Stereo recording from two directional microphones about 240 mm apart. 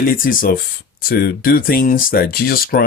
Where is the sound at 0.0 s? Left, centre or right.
Left.